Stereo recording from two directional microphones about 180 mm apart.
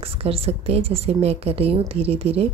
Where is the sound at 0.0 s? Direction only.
30° right (ahead or behind).